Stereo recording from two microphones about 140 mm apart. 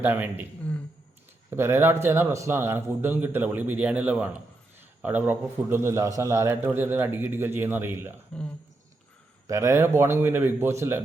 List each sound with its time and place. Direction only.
0.0 s a man's voice: 15° right (ahead or behind)
1.5 s a man's voice: 20° right (ahead or behind)
8.3 s speech: 5° left (ahead or behind)
9.5 s speech: 20° right (ahead or behind)